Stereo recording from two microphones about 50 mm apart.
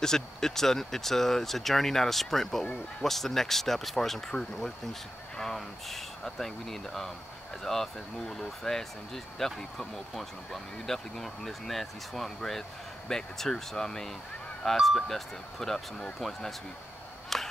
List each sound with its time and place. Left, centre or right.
0.0 s speech: centre
2.6 s speech: centre
3.1 s speech: centre
17.3 s a sound: centre